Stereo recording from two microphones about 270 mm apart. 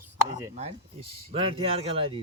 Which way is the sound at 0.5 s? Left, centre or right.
Right.